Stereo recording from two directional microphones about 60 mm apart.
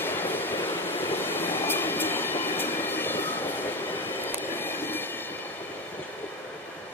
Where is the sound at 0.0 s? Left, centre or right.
Left.